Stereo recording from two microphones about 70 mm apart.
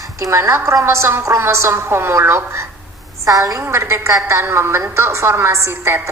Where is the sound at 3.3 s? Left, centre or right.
Right.